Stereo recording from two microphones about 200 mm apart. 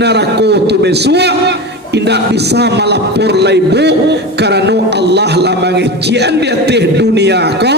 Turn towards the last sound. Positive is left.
turn(degrees=-55)  # may be behind; listen again after turning